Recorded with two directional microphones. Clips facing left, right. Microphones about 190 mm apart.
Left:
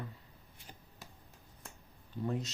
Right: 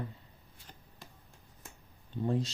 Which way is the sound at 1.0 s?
5° left (ahead or behind).